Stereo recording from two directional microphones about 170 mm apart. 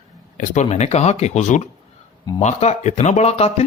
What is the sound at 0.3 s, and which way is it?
Speech, 50° left (ahead or behind).